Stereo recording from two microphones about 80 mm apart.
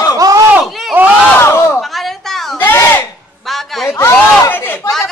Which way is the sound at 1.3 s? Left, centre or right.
Left.